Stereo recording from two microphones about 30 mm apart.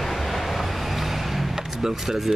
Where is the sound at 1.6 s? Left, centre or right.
Centre.